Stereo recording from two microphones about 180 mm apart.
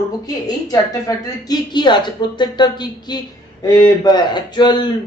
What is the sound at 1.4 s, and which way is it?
A man's voice, 25° left (ahead or behind).